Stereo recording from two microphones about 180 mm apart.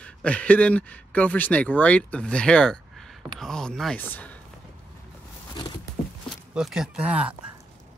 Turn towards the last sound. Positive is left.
turn(degrees=-5)  # may be behind; listen again after turning